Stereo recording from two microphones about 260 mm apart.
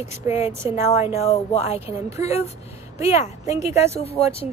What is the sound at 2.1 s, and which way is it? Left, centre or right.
Speech, left.